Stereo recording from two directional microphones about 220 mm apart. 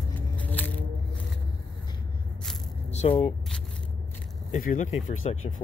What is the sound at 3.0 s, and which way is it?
Speech, 30° left (ahead or behind).